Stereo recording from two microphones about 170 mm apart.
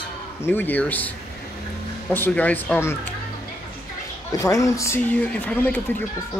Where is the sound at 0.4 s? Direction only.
10° left (ahead or behind).